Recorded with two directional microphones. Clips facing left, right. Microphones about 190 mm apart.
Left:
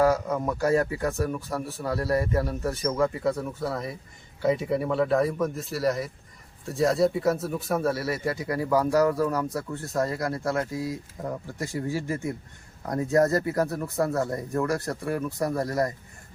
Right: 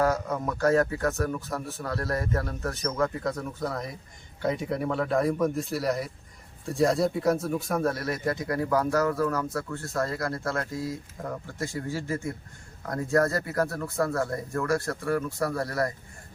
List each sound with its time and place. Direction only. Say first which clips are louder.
0.0 s speech: left 3 dB; 10° left (ahead or behind)